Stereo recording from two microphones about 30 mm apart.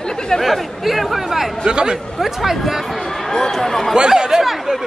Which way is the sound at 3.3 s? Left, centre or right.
Centre.